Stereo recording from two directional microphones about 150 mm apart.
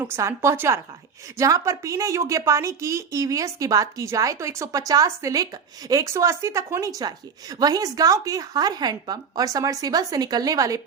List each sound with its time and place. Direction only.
0.0 s a woman's voice: 15° right (ahead or behind)